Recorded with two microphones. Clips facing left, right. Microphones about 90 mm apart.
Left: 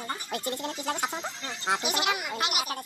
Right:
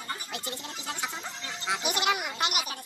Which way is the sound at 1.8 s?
Centre (ahead or behind).